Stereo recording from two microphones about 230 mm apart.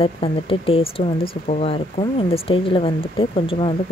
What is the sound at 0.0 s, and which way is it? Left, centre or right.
Speech, left.